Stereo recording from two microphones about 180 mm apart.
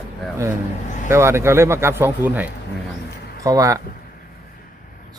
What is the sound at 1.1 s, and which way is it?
Speech, 15° right (ahead or behind).